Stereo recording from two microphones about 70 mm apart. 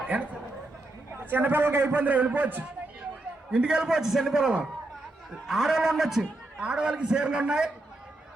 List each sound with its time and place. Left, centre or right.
0.0 s a man's voice: centre
3.5 s a man's voice: centre